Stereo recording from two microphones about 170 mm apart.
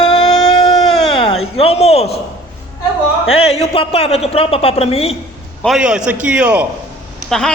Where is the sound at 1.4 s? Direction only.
35° left (ahead or behind).